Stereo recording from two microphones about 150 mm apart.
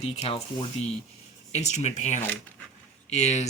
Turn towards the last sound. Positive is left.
turn(degrees=50)  # may be behind; listen again after turning